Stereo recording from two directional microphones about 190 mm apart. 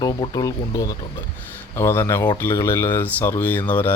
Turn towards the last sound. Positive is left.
turn(degrees=10)  # may be behind; listen again after turning